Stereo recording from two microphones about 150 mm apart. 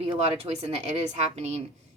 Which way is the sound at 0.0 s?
45° right (ahead or behind).